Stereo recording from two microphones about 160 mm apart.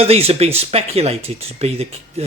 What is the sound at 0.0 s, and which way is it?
Speech, 40° right (ahead or behind).